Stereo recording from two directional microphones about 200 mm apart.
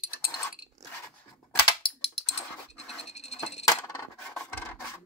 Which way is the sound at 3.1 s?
35° left (ahead or behind).